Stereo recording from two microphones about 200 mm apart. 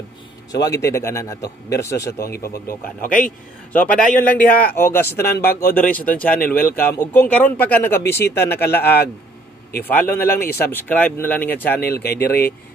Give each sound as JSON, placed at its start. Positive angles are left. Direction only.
{"t": 0.5, "sound": "a man's voice", "side_deg": 15}
{"t": 3.0, "sound": "speech", "side_deg": 45}
{"t": 3.9, "sound": "a man's voice", "side_deg": 5}
{"t": 12.3, "sound": "speech", "side_deg": 50}